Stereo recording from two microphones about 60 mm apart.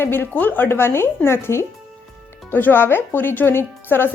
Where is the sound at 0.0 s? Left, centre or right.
Left.